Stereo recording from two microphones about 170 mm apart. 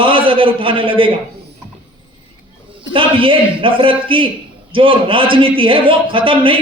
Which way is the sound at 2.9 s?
30° right (ahead or behind).